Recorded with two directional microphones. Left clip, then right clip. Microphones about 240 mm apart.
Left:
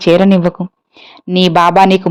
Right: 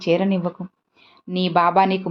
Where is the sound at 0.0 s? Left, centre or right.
Left.